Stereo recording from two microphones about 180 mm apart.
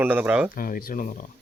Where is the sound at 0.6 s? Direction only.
55° left (ahead or behind).